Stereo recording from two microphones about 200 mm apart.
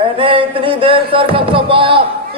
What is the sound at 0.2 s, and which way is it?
A man's voice, 25° right (ahead or behind).